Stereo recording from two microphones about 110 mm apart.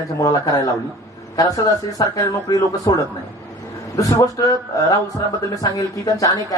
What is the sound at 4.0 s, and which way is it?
A man's voice, 30° left (ahead or behind).